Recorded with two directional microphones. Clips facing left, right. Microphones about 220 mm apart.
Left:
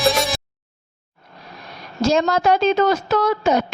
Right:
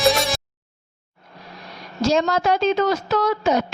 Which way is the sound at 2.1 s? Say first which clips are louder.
Left 2 dB; 50° left (ahead or behind).